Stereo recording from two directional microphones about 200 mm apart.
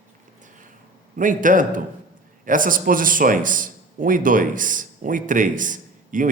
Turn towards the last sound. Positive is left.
turn(degrees=-40)  # may be behind; listen again after turning